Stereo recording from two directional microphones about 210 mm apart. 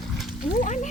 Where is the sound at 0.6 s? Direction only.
35° left (ahead or behind).